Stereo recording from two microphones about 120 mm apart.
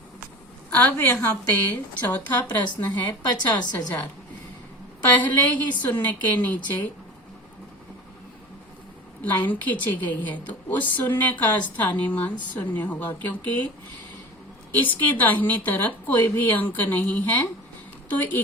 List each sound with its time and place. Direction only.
0.7 s a woman's voice: 15° left (ahead or behind)
3.2 s a woman's voice: 35° left (ahead or behind)
5.1 s a woman's voice: 15° left (ahead or behind)
9.2 s a woman's voice: 15° left (ahead or behind)
14.8 s a woman's voice: 15° left (ahead or behind)